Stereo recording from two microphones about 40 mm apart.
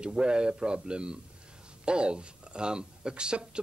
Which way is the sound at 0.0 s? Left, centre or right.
Right.